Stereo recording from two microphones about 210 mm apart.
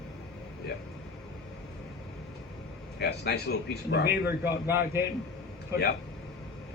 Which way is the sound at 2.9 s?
50° left (ahead or behind).